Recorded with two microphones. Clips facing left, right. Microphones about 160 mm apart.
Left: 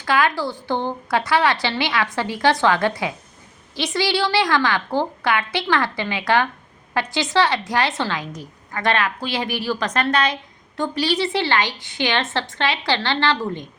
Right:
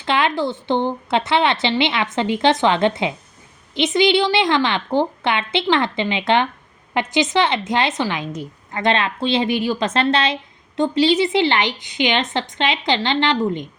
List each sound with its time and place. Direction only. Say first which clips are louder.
0.0 s a woman's voice: right 1 dB; 25° right (ahead or behind)